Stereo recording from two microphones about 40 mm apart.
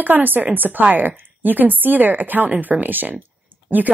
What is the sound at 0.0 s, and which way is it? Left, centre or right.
A woman's voice, right.